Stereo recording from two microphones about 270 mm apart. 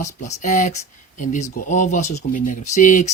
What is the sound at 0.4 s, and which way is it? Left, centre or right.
Speech, left.